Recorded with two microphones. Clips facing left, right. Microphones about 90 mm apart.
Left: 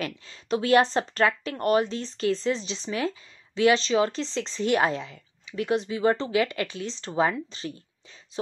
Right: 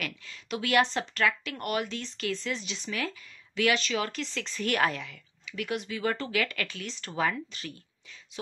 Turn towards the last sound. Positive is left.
turn(degrees=30)  # may be behind; listen again after turning